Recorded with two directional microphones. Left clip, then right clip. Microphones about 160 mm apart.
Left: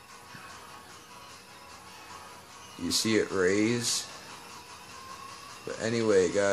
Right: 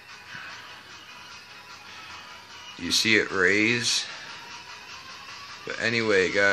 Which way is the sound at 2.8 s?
5° left (ahead or behind).